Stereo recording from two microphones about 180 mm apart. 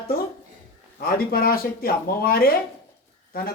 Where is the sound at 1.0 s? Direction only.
55° left (ahead or behind).